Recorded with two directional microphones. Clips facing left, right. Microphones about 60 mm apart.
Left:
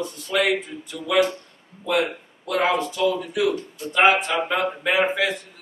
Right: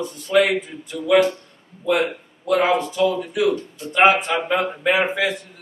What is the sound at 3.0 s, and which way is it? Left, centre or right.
A man's voice, right.